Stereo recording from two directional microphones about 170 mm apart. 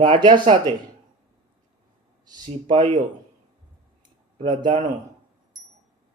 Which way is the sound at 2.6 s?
30° right (ahead or behind).